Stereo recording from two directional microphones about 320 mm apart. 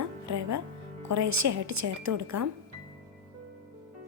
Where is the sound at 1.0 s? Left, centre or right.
Right.